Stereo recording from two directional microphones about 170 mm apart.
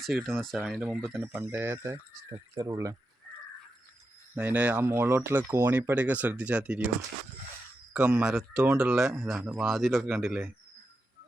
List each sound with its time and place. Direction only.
0.0 s speech: centre (ahead or behind); by 2.9 s 20° right (ahead or behind)
4.4 s speech: 10° right (ahead or behind)
7.9 s speech: 5° right (ahead or behind)